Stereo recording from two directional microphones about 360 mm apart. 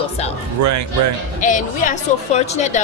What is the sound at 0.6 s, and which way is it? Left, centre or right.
Speech, right.